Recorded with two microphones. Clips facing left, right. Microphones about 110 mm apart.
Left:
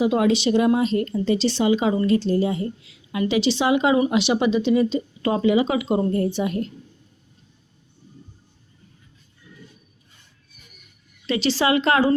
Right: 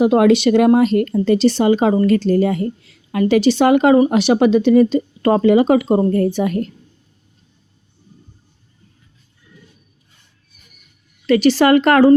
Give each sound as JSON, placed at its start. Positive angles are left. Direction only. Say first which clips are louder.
{"t": 0.0, "sound": "speech", "louder": "right 7 dB", "side_deg": -55}
{"t": 6.1, "sound": "a woman's voice", "louder": "right 6 dB", "side_deg": -70}
{"t": 6.3, "sound": "speech", "louder": "right 5 dB", "side_deg": -50}
{"t": 11.3, "sound": "speech", "louder": "right 9 dB", "side_deg": -50}